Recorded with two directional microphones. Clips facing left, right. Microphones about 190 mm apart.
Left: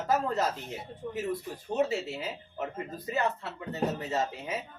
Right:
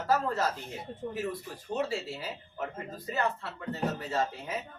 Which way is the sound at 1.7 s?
20° left (ahead or behind).